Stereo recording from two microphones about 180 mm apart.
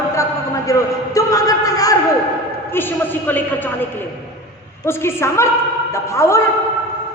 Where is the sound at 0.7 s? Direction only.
20° left (ahead or behind).